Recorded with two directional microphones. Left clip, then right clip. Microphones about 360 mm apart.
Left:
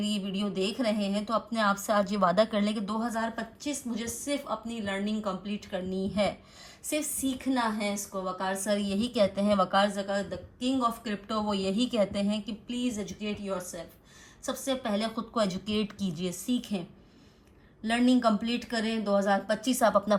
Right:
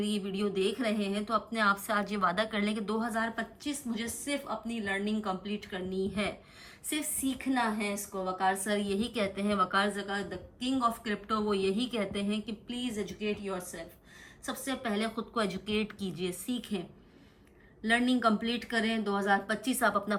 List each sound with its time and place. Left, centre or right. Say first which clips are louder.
0.0 s a woman's voice: even; centre
6.9 s a woman's voice: left 3 dB; centre
17.8 s a woman's voice: left 2 dB; centre